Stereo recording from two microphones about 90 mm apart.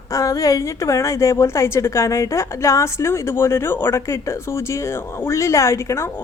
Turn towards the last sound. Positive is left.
turn(degrees=35)  # may be behind; listen again after turning